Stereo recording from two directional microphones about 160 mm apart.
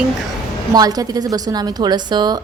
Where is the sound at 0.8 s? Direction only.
25° right (ahead or behind).